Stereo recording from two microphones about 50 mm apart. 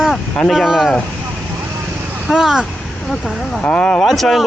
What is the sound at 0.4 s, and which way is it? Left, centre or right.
Speech, centre.